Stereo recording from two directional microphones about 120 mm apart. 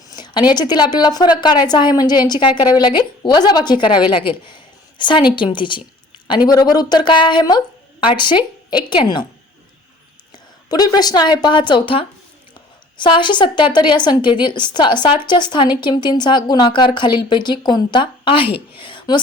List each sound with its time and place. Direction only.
0.1 s a woman's voice: 40° left (ahead or behind)
10.3 s a woman's voice: 35° left (ahead or behind)